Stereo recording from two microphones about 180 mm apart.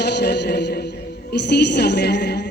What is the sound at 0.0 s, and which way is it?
Speech, 65° left (ahead or behind).